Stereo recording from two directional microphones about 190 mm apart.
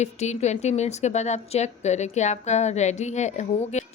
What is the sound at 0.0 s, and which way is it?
A woman's voice, 35° left (ahead or behind).